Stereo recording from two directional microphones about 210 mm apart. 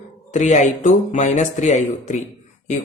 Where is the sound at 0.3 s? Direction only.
35° left (ahead or behind).